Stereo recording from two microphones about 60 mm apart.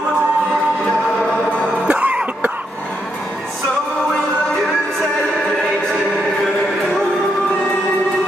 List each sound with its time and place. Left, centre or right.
1.9 s cough: right